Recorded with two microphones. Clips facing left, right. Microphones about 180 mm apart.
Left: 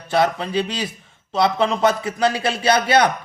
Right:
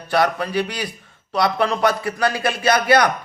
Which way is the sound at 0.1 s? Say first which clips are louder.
Even; 25° left (ahead or behind).